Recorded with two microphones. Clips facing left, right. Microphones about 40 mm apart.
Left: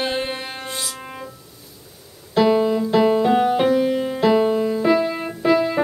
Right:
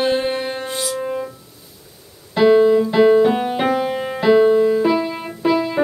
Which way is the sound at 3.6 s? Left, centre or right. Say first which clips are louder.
Left 1 dB; centre.